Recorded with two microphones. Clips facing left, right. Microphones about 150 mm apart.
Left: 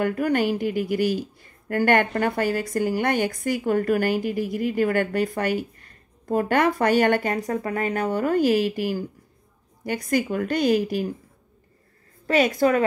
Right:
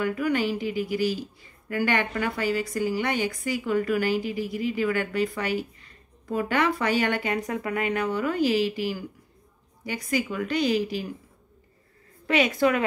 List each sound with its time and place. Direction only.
0.0 s a woman's voice: 50° left (ahead or behind)
7.3 s a woman's voice: 35° left (ahead or behind); by 11.1 s 50° left (ahead or behind)
12.3 s a woman's voice: 40° left (ahead or behind)